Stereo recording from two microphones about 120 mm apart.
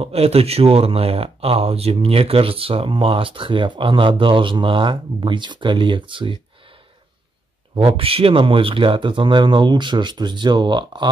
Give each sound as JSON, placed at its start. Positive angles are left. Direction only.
{"t": 0.0, "sound": "speech", "side_deg": -60}
{"t": 7.7, "sound": "speech", "side_deg": -50}